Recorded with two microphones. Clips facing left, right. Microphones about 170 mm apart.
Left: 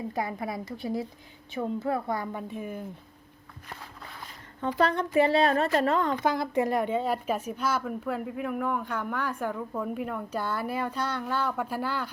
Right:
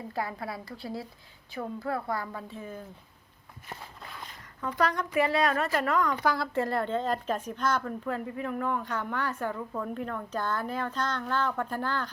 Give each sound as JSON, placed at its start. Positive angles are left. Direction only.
{"t": 0.1, "sound": "a woman's voice", "side_deg": 20}
{"t": 4.6, "sound": "a woman's voice", "side_deg": 25}